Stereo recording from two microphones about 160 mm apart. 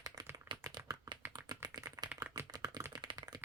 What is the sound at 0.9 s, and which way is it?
Typing, 30° right (ahead or behind).